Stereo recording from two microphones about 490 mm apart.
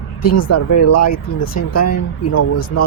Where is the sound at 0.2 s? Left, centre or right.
Left.